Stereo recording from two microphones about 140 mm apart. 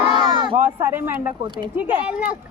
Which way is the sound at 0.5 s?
15° right (ahead or behind).